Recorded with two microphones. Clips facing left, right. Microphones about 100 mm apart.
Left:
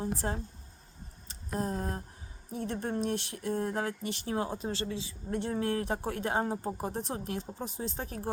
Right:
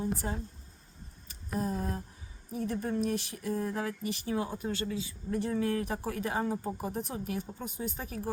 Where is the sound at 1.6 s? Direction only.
35° left (ahead or behind).